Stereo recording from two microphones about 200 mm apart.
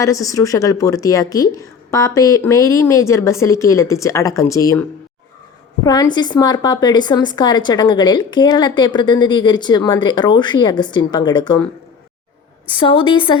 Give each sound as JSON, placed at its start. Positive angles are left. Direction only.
{"t": 0.0, "sound": "a woman's voice", "side_deg": 15}
{"t": 12.7, "sound": "a woman's voice", "side_deg": 25}